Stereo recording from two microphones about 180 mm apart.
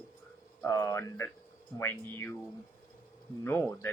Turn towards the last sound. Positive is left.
turn(degrees=15)  # may be behind; listen again after turning